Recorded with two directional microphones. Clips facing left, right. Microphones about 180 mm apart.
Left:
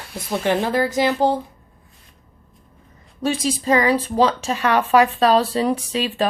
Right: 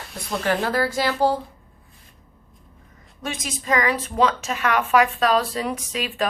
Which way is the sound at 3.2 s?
30° left (ahead or behind).